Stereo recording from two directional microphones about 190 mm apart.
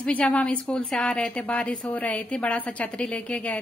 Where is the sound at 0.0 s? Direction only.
5° left (ahead or behind).